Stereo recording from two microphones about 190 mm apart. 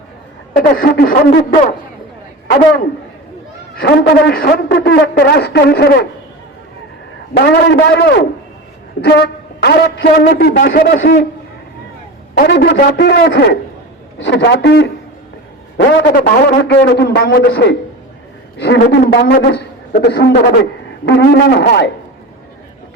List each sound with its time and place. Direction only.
0.5 s speech: 45° left (ahead or behind)
3.8 s a man's voice: 55° left (ahead or behind)
7.3 s a man's voice: 60° left (ahead or behind); by 11.2 s 45° left (ahead or behind)
12.4 s a man's voice: 55° left (ahead or behind)
16.0 s a man's voice: 50° left (ahead or behind)